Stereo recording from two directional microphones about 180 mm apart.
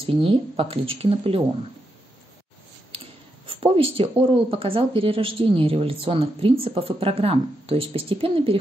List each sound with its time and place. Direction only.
0.0 s speech: 30° right (ahead or behind)
3.4 s speech: 30° right (ahead or behind)